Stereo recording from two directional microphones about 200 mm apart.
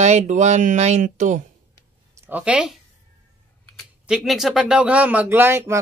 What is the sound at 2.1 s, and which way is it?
Speech, 10° right (ahead or behind).